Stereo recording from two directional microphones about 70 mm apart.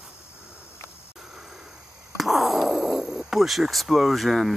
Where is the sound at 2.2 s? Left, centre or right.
Centre.